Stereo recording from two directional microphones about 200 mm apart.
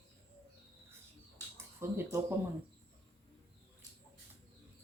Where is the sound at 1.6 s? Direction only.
15° right (ahead or behind).